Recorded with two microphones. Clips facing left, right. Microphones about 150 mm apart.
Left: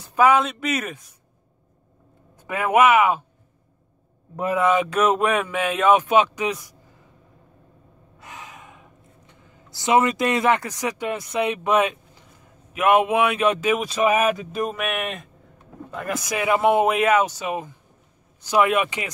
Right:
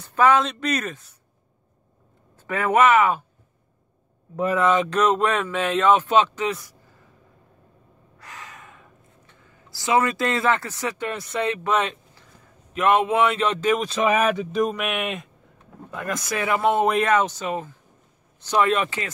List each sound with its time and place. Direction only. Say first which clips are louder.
0.0 s speech: left 1 dB; 10° left (ahead or behind)
2.3 s speech: left 1 dB; 10° left (ahead or behind)
4.4 s speech: even; 10° left (ahead or behind)
8.2 s gasp: left 1 dB; 15° left (ahead or behind)
12.7 s speech: left 1 dB; 10° left (ahead or behind)